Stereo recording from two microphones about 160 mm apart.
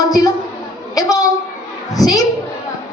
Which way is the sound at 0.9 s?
20° left (ahead or behind).